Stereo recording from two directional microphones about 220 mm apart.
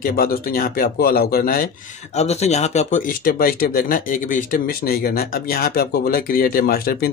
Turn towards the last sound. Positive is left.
turn(degrees=45)  # may be behind; listen again after turning